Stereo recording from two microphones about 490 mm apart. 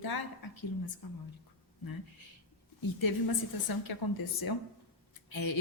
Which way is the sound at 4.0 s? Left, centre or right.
Left.